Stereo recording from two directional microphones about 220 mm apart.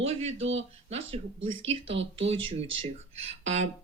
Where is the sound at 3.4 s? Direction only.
30° right (ahead or behind).